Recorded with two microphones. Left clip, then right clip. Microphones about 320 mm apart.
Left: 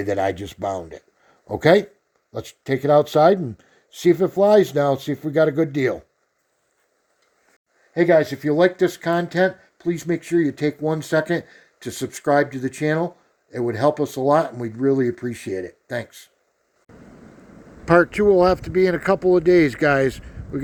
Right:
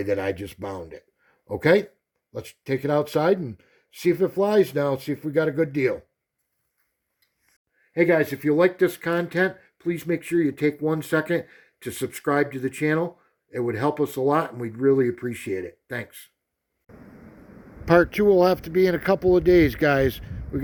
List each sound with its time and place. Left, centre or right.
0.0 s speech: left
7.9 s speech: left
17.8 s speech: centre